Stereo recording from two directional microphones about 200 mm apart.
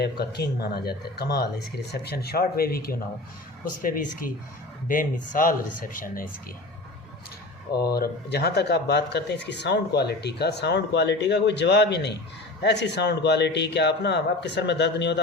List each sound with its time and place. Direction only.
0.0 s speech: 55° left (ahead or behind)
7.8 s speech: 50° left (ahead or behind)